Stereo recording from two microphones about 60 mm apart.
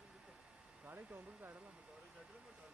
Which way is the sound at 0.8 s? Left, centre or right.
Right.